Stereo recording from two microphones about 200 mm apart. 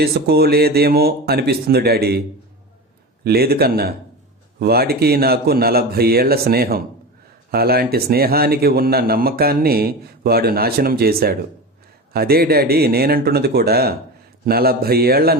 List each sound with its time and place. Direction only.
0.0 s speech: 50° right (ahead or behind)
3.2 s speech: 50° right (ahead or behind)